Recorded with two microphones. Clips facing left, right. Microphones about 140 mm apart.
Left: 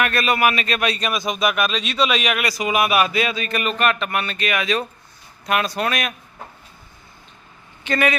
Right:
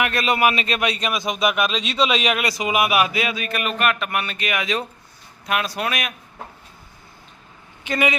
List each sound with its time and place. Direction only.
0.0 s speech: 20° right (ahead or behind)
5.5 s speech: 5° right (ahead or behind)
7.9 s speech: 15° right (ahead or behind)